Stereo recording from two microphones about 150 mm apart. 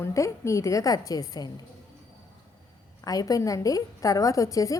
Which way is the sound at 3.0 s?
25° left (ahead or behind).